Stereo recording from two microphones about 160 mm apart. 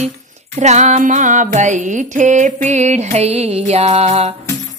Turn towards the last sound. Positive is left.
turn(degrees=-40)  # may be behind; listen again after turning